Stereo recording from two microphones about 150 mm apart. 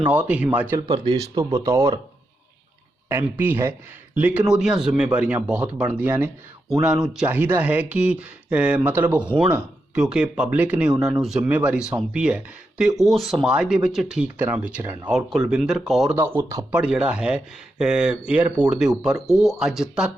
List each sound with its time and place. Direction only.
0.0 s speech: 10° right (ahead or behind)
1.0 s speech: 25° right (ahead or behind)
3.1 s speech: 15° right (ahead or behind)
16.1 s speech: 15° right (ahead or behind)
16.7 s speech: 5° right (ahead or behind)